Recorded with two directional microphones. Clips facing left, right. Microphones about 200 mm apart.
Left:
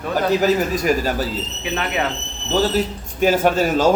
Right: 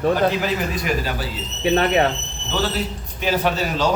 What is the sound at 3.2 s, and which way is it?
Speech, 45° left (ahead or behind).